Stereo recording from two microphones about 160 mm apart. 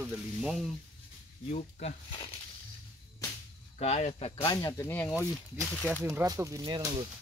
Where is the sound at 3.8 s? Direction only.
45° left (ahead or behind).